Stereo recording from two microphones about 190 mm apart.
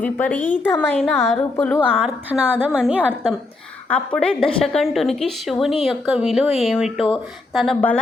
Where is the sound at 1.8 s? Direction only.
5° right (ahead or behind).